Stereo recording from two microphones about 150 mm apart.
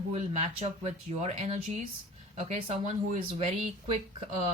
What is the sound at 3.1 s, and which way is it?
Speech, 50° right (ahead or behind).